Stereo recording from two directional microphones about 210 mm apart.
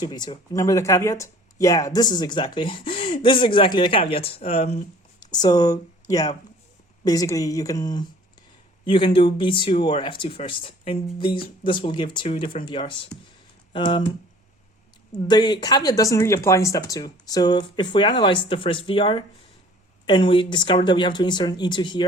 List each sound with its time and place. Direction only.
0.0 s speech: 20° left (ahead or behind)
5.2 s speech: 20° left (ahead or behind)
15.3 s speech: 20° left (ahead or behind)